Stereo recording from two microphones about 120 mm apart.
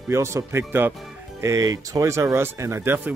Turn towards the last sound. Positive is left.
turn(degrees=-20)  # may be behind; listen again after turning